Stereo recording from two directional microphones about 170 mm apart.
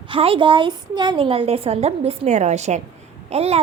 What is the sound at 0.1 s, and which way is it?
A woman's voice, 30° right (ahead or behind).